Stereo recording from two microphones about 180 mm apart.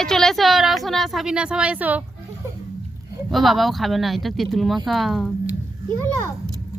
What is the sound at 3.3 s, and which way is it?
A woman's voice, centre (ahead or behind).